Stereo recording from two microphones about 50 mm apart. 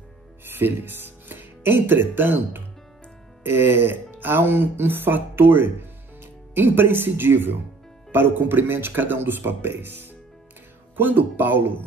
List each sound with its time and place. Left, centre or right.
0.5 s speech: right